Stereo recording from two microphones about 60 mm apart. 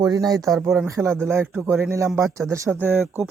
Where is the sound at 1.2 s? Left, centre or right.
Right.